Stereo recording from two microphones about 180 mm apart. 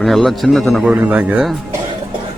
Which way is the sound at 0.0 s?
Centre (ahead or behind).